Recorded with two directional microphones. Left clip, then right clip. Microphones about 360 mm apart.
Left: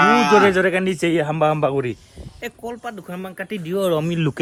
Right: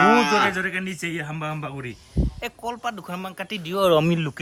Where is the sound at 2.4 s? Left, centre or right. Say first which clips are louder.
Left 1 dB; centre.